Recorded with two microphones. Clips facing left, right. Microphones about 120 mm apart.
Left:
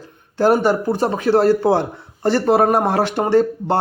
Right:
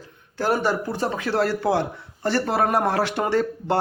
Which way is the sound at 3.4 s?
25° left (ahead or behind).